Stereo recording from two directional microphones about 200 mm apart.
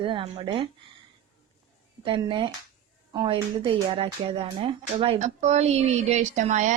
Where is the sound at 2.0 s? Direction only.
25° right (ahead or behind).